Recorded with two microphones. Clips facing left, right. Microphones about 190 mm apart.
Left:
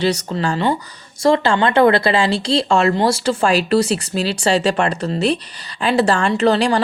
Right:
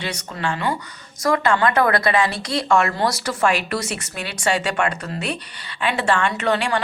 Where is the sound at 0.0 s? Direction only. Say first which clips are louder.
Left 8 dB; 35° left (ahead or behind).